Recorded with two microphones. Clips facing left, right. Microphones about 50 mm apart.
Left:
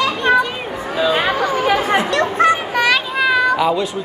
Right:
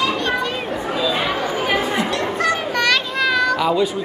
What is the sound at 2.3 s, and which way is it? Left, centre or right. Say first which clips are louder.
Children playing: left 7 dB; left.